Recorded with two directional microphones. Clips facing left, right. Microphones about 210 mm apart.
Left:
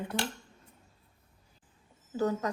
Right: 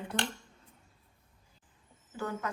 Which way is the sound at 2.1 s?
35° left (ahead or behind).